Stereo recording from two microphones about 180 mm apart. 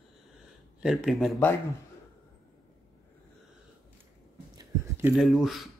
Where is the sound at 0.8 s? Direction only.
Centre (ahead or behind).